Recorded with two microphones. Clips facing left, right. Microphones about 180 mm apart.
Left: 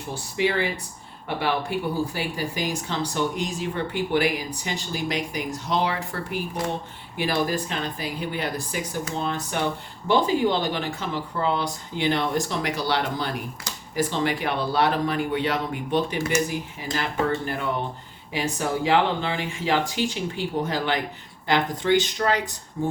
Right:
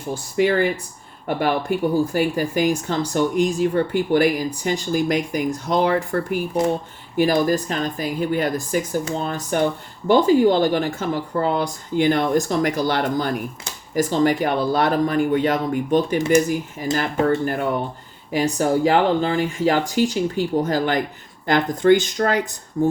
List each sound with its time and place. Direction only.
0.1 s speech: 45° right (ahead or behind)